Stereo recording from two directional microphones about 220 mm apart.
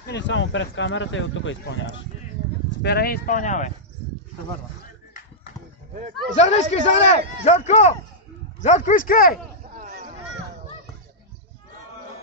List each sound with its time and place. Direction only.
0.0 s speech: 55° left (ahead or behind)
2.8 s speech: 45° left (ahead or behind)
6.3 s speech: 30° left (ahead or behind)
9.8 s a sound: 35° right (ahead or behind)